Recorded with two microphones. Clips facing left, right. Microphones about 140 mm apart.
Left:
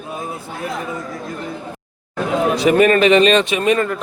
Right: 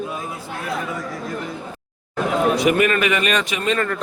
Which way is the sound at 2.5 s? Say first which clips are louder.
Left 4 dB; 30° left (ahead or behind).